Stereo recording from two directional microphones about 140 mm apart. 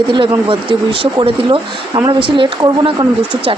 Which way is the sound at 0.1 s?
40° right (ahead or behind).